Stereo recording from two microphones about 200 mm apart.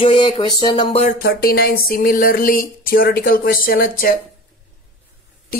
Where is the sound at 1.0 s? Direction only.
50° left (ahead or behind).